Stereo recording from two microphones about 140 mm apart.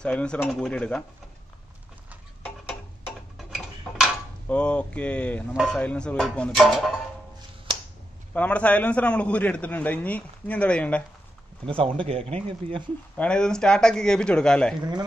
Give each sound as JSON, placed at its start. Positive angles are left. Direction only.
{"t": 0.0, "sound": "a man's voice", "side_deg": 5}
{"t": 3.3, "sound": "tick-tock", "side_deg": -5}
{"t": 4.5, "sound": "a man's voice", "side_deg": 10}
{"t": 5.5, "sound": "a man's voice", "side_deg": -5}
{"t": 5.8, "sound": "a man's voice", "side_deg": 5}
{"t": 8.3, "sound": "a man's voice", "side_deg": 10}
{"t": 11.6, "sound": "speech", "side_deg": -40}
{"t": 13.2, "sound": "a man's voice", "side_deg": 5}